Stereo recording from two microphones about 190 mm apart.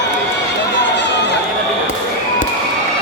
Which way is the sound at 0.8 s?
70° left (ahead or behind).